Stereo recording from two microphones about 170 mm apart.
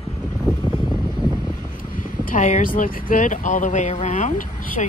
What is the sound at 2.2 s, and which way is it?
Speech, 50° left (ahead or behind).